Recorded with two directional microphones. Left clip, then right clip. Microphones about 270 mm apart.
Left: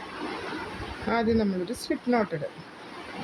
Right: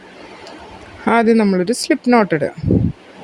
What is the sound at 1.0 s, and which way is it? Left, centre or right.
Speech, right.